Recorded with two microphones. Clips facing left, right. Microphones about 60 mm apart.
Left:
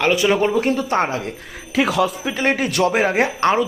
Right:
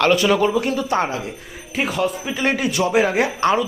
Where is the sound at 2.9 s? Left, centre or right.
Left.